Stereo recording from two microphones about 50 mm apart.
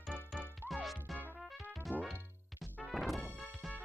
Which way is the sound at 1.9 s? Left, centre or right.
Right.